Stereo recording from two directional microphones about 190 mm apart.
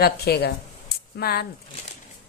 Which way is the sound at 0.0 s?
55° left (ahead or behind).